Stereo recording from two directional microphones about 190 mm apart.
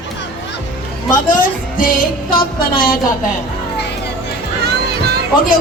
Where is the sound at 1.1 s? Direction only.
45° left (ahead or behind).